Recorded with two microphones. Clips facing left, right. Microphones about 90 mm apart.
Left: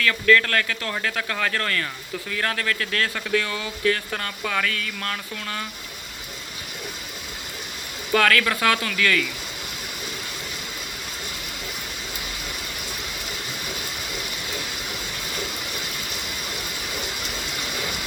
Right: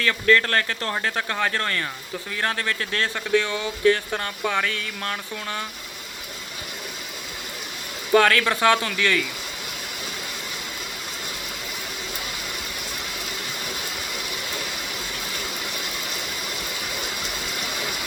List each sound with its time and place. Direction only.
0.0 s speech: 25° right (ahead or behind)
8.1 s speech: 20° right (ahead or behind)